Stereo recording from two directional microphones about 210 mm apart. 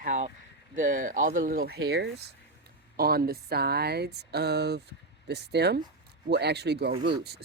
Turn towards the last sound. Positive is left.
turn(degrees=-50)  # may be behind; listen again after turning